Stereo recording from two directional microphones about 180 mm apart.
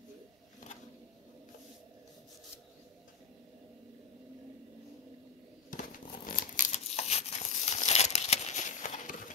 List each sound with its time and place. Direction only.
5.7 s crumpling: 45° left (ahead or behind)